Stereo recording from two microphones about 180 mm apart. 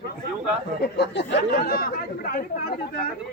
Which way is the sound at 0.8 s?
70° left (ahead or behind).